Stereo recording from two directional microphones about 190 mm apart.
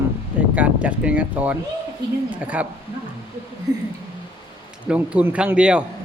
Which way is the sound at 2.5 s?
5° right (ahead or behind).